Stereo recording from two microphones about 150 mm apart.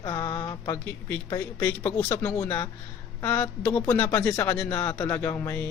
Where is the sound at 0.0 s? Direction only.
20° left (ahead or behind).